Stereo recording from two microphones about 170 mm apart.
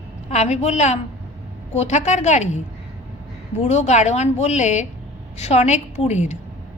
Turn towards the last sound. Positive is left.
turn(degrees=40)  # may be behind; listen again after turning